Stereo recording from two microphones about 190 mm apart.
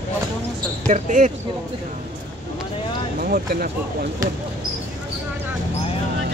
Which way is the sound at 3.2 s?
50° right (ahead or behind).